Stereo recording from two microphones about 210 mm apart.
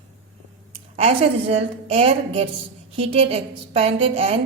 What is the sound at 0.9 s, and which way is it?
A woman's voice, 30° right (ahead or behind).